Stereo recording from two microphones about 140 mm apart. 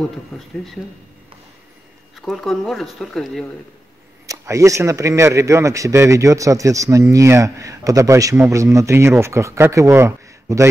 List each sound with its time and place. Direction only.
2.2 s speech: centre (ahead or behind)
4.3 s a man's voice: 20° right (ahead or behind)